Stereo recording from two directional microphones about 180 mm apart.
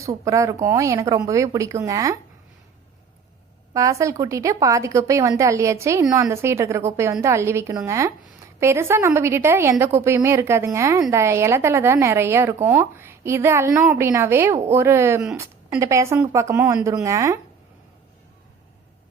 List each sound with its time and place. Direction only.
0.3 s a woman's voice: 15° right (ahead or behind)
3.8 s a woman's voice: 15° right (ahead or behind)